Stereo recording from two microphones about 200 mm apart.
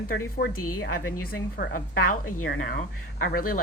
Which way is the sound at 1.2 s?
45° left (ahead or behind).